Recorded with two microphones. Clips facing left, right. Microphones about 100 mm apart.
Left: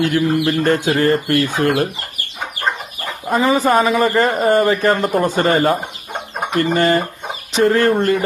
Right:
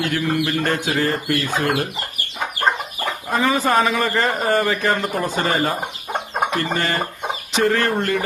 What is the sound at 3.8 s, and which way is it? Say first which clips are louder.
Speech: left 5 dB; 30° left (ahead or behind).